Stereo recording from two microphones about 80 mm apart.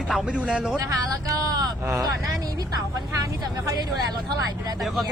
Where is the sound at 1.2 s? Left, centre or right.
Right.